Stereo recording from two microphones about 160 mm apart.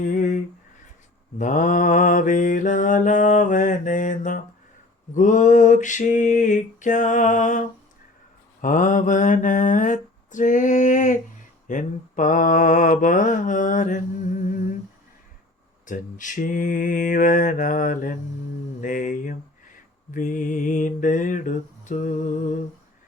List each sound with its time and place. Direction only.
0.0 s a sound: 55° left (ahead or behind)
1.4 s mantra: 50° left (ahead or behind)
8.6 s mantra: 55° left (ahead or behind)
15.9 s mantra: 55° left (ahead or behind)